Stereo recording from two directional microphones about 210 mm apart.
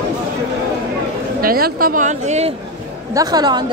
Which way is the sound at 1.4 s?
45° right (ahead or behind).